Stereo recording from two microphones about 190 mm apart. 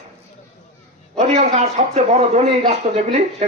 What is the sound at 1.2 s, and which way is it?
A man's voice, 35° right (ahead or behind).